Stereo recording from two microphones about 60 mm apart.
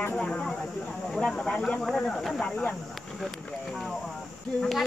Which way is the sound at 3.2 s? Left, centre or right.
Centre.